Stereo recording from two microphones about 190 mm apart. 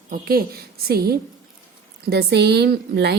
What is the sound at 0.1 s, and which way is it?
A woman's voice, 50° right (ahead or behind).